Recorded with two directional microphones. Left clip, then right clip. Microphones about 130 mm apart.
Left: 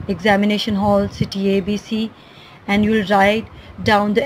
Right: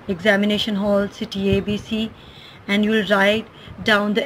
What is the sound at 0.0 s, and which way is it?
A woman's voice, 45° left (ahead or behind).